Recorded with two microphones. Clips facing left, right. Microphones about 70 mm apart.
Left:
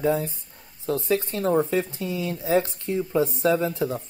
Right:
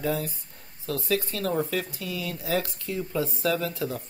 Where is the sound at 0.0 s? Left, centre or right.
Left.